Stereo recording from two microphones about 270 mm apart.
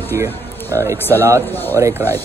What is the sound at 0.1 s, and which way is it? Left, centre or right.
Speech, centre.